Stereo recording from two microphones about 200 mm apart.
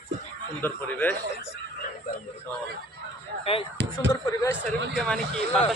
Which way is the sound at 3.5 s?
30° left (ahead or behind).